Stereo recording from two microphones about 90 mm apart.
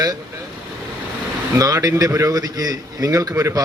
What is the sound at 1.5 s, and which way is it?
A man's voice, 40° right (ahead or behind).